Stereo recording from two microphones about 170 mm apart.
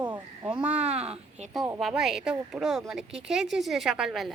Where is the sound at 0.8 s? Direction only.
40° right (ahead or behind).